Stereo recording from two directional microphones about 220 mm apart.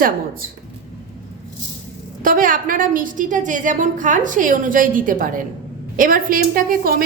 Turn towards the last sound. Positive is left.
turn(degrees=-40)  # may be behind; listen again after turning